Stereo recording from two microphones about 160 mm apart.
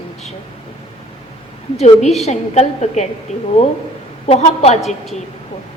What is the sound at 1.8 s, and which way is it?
A woman's voice, 45° left (ahead or behind).